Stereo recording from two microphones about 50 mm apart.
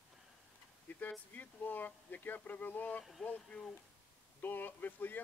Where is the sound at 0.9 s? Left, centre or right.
Left.